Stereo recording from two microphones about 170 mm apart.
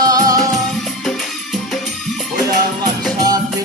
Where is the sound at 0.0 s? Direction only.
20° right (ahead or behind).